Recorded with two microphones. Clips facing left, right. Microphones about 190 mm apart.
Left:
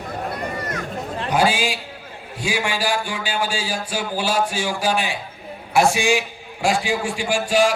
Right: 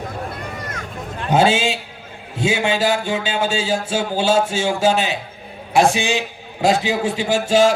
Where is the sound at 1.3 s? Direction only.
25° right (ahead or behind).